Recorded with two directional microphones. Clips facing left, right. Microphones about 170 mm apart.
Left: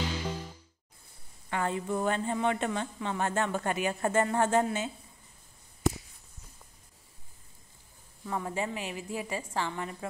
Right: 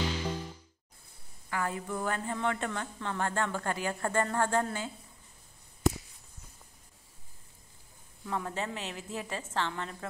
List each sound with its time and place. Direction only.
0.2 s music: 10° left (ahead or behind)
1.5 s a woman's voice: 25° left (ahead or behind)
8.3 s a woman's voice: 5° left (ahead or behind)